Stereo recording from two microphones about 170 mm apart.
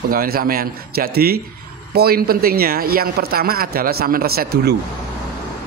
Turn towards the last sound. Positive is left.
turn(degrees=-70)  # may be behind; listen again after turning